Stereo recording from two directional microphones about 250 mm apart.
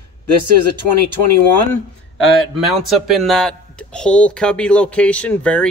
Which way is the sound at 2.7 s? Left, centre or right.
Centre.